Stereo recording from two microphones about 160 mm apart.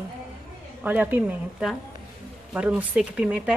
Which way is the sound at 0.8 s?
10° right (ahead or behind).